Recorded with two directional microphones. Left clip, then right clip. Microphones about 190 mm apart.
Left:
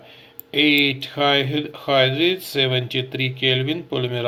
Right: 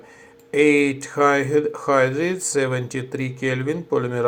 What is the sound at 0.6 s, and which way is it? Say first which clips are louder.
Speech: even; 25° right (ahead or behind).